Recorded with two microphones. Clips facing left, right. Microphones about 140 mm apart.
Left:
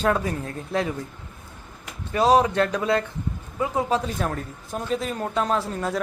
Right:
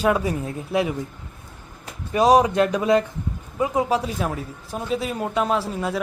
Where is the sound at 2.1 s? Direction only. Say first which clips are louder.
Right 2 dB; 15° right (ahead or behind).